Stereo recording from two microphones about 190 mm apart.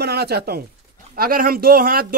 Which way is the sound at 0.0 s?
55° right (ahead or behind).